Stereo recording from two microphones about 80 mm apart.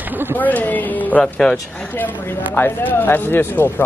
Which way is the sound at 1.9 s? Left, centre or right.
Left.